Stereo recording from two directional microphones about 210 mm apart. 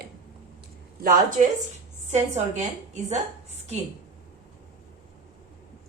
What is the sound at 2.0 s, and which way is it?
A woman's voice, 35° right (ahead or behind).